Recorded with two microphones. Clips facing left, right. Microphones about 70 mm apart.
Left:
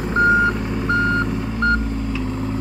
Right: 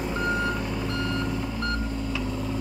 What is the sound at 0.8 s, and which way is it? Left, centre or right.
Reversing beeps, left.